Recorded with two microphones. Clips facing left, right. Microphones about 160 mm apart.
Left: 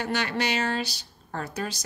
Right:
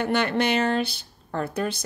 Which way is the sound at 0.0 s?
55° right (ahead or behind).